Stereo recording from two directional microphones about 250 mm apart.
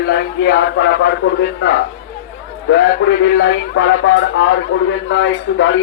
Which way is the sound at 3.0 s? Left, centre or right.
Left.